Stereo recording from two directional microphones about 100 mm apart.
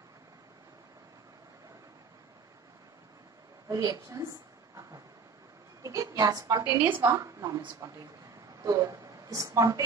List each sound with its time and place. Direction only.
3.6 s a sound: 30° right (ahead or behind)
5.8 s a woman's voice: 35° right (ahead or behind)
7.0 s a woman's voice: 35° right (ahead or behind)
8.6 s a woman's voice: 35° right (ahead or behind)